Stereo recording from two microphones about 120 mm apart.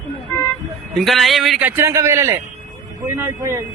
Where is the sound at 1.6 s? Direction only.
15° right (ahead or behind).